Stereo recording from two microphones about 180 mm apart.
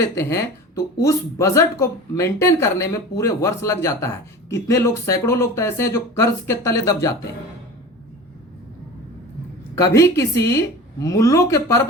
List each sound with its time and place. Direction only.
0.0 s speech: 15° left (ahead or behind)
9.7 s speech: 15° left (ahead or behind)